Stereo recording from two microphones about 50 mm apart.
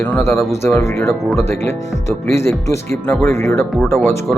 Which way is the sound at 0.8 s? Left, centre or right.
Left.